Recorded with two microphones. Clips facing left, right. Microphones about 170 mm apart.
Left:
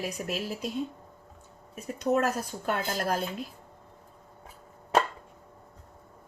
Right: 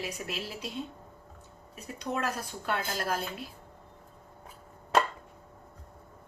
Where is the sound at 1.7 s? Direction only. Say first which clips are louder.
Left 8 dB; 45° left (ahead or behind).